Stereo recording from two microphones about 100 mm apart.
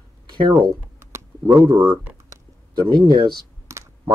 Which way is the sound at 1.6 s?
50° right (ahead or behind).